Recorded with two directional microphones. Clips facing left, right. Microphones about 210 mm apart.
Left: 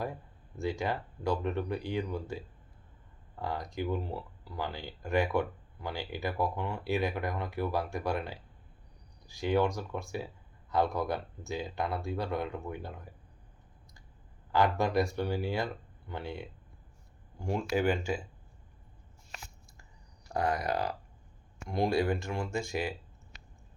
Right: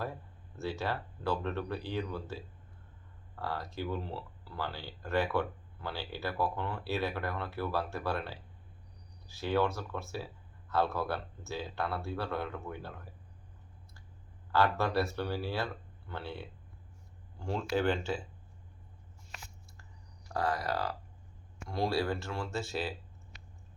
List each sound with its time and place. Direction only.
0.5 s speech: 15° left (ahead or behind)
14.5 s speech: 15° left (ahead or behind)
20.2 s speech: 15° left (ahead or behind)